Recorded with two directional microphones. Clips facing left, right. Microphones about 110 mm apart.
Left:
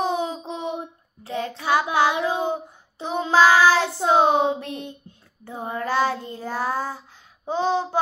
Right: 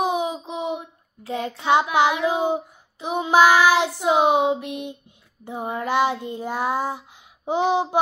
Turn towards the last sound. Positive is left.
turn(degrees=-15)  # may be behind; listen again after turning